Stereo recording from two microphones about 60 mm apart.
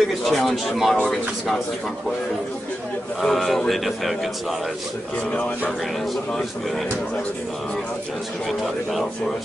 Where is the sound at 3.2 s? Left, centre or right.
Centre.